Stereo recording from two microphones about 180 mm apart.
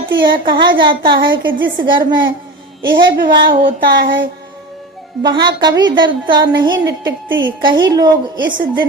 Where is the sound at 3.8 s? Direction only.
55° right (ahead or behind).